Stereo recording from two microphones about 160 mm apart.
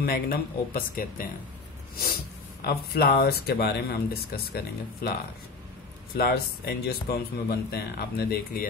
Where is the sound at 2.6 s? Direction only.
75° left (ahead or behind).